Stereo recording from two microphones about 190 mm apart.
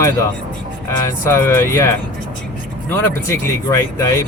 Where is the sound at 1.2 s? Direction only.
15° left (ahead or behind).